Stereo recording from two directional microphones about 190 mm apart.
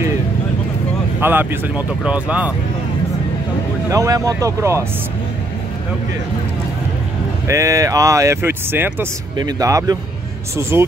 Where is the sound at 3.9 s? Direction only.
15° right (ahead or behind).